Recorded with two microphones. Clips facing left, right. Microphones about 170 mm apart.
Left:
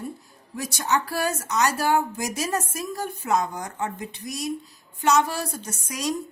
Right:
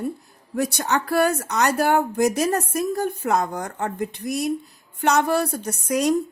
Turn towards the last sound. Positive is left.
turn(degrees=-55)  # may be behind; listen again after turning